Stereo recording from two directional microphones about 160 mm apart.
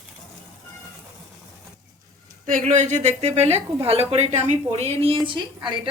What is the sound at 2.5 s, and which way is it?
A woman's voice, 50° right (ahead or behind).